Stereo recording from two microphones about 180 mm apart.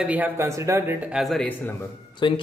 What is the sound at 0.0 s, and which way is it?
Speech, 10° right (ahead or behind).